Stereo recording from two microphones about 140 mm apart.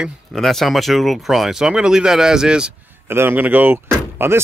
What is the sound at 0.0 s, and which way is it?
Speech, centre (ahead or behind).